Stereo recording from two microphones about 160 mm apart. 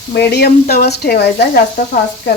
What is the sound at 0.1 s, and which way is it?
Speech, 90° left.